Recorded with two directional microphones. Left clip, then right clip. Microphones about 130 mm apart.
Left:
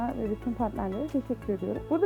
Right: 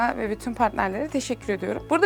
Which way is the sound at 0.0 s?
30° left (ahead or behind).